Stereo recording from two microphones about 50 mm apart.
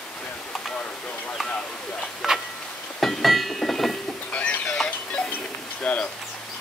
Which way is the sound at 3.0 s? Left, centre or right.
Centre.